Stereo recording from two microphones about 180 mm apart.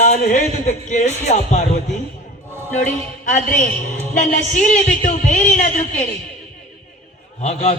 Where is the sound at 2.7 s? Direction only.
40° left (ahead or behind).